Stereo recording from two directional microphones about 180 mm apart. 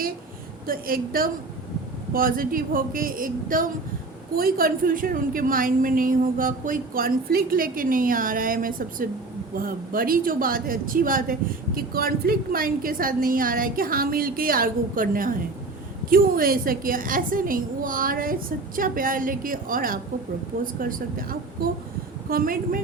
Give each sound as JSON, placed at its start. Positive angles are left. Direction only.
{"t": 0.7, "sound": "speech", "side_deg": -55}